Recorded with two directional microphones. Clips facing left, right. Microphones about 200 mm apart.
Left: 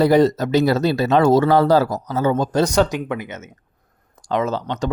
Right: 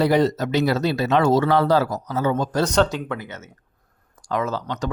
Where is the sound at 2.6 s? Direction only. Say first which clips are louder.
Left 1 dB; 10° left (ahead or behind).